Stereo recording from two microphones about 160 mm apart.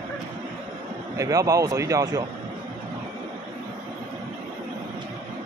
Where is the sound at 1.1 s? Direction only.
20° right (ahead or behind).